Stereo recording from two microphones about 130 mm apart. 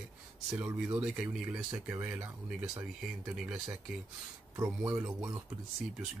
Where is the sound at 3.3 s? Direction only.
5° right (ahead or behind).